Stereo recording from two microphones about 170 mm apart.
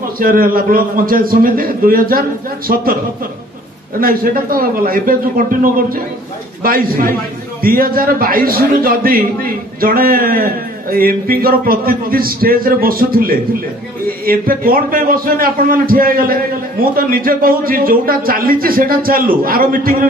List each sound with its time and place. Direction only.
0.2 s a man's voice: 55° right (ahead or behind)
4.0 s a man's voice: 60° right (ahead or behind)